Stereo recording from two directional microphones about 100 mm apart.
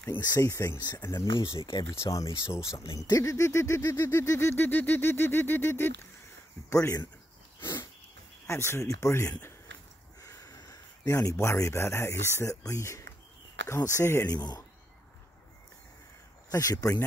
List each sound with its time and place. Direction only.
0.2 s speech: 40° left (ahead or behind)
1.1 s speech: 55° left (ahead or behind)
1.9 s speech: 30° left (ahead or behind)
8.5 s speech: 25° left (ahead or behind)
14.3 s speech: 45° left (ahead or behind)
16.4 s speech: 40° left (ahead or behind)